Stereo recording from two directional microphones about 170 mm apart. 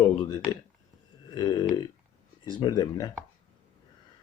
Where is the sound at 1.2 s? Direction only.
25° left (ahead or behind).